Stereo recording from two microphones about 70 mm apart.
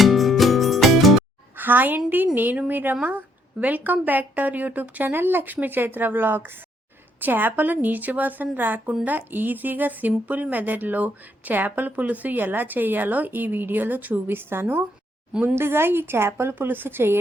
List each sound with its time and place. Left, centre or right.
0.0 s music: centre
1.5 s a woman's voice: right